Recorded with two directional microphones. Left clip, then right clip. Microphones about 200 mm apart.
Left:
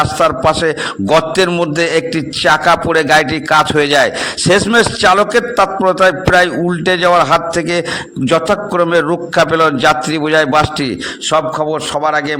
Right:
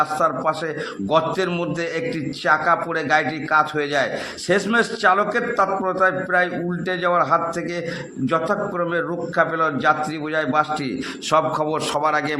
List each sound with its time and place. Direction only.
0.2 s a man's voice: 35° left (ahead or behind)
11.3 s a man's voice: 25° left (ahead or behind)